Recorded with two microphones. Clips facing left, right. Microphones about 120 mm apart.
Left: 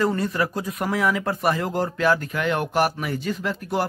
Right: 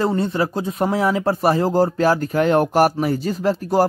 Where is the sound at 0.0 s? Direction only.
25° right (ahead or behind).